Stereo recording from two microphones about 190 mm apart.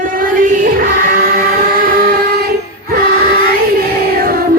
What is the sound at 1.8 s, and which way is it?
Train, 55° right (ahead or behind).